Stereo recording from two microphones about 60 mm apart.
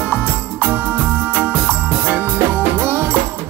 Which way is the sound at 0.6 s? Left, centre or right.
Right.